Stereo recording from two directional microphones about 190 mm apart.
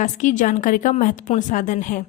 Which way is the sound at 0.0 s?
40° left (ahead or behind).